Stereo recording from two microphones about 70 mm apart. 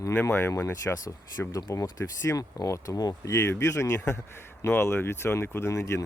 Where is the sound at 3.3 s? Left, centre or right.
Left.